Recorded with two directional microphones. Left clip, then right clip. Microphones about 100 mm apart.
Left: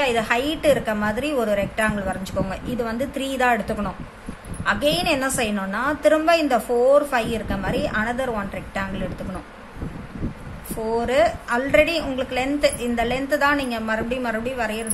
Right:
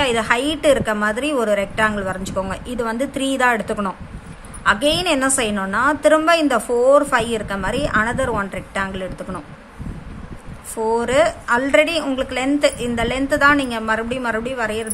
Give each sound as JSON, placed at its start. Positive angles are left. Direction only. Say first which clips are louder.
{"t": 0.0, "sound": "a woman's voice", "louder": "right 3 dB", "side_deg": -50}
{"t": 10.9, "sound": "a woman's voice", "louder": "right 3 dB", "side_deg": -55}